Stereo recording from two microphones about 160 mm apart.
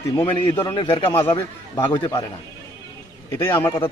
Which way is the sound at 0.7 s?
30° left (ahead or behind).